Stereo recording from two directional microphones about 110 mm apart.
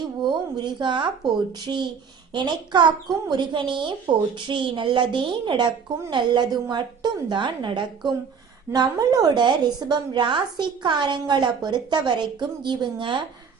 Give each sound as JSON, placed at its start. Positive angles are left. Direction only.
{"t": 0.2, "sound": "a woman's voice", "side_deg": -45}